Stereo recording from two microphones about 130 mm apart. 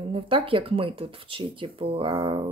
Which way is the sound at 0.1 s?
45° right (ahead or behind).